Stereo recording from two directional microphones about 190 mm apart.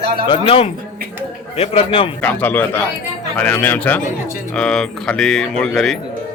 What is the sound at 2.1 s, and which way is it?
A man's voice, 10° left (ahead or behind).